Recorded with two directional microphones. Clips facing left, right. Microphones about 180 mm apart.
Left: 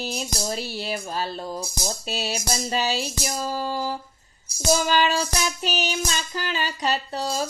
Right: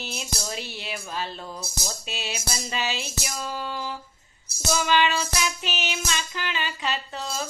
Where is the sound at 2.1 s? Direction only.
40° left (ahead or behind).